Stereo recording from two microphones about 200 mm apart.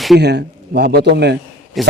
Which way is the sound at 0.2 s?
55° right (ahead or behind).